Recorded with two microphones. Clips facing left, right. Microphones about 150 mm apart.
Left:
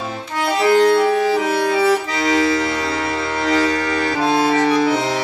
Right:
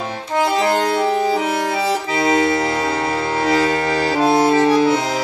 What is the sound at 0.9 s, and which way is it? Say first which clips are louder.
Accordion: left 2 dB; 25° right (ahead or behind).